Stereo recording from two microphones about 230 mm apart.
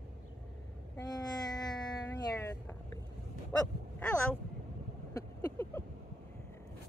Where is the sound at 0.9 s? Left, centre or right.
Centre.